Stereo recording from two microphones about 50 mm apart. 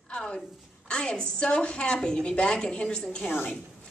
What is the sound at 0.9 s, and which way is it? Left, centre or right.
A woman's voice, centre.